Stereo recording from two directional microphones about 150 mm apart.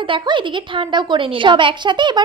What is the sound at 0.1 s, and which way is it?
Speech, 35° right (ahead or behind).